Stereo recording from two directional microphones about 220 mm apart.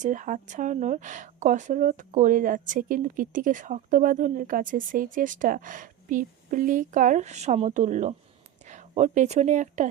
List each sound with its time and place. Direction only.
0.0 s speech: 35° right (ahead or behind)